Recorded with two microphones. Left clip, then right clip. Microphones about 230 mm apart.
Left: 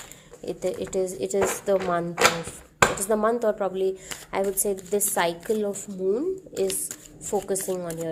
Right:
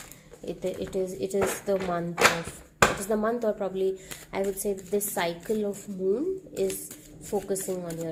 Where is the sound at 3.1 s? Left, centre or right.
Left.